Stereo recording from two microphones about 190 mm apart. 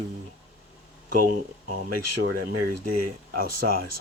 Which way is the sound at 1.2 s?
45° right (ahead or behind).